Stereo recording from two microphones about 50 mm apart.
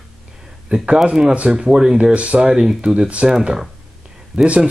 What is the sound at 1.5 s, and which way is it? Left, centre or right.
Speech, centre.